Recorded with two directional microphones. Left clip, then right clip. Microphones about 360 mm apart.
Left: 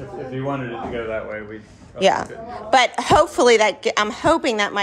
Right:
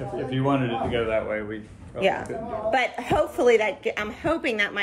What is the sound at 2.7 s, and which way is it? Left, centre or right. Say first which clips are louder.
A woman's voice: left 9 dB; centre.